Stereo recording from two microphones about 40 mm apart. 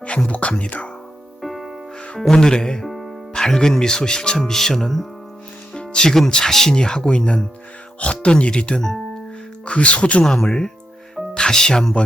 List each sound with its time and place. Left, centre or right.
0.3 s music: left
1.4 s music: centre
2.3 s speech: centre
2.8 s music: centre
3.3 s speech: centre
5.7 s music: left
6.1 s speech: centre
8.8 s music: centre
9.6 s speech: left
10.4 s speech: centre